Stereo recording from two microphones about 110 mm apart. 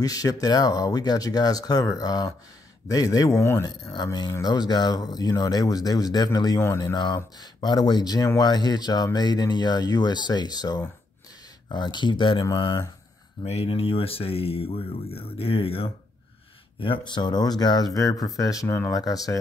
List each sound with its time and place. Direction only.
0.0 s speech: 35° left (ahead or behind)
3.9 s speech: 40° left (ahead or behind)
12.4 s speech: 30° left (ahead or behind)
13.4 s speech: 60° left (ahead or behind); by 19.3 s 35° left (ahead or behind)